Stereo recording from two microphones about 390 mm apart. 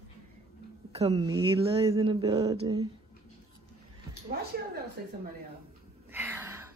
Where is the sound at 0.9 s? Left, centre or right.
Centre.